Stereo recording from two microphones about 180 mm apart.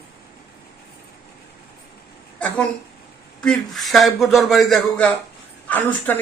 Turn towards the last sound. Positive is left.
turn(degrees=10)  # may be behind; listen again after turning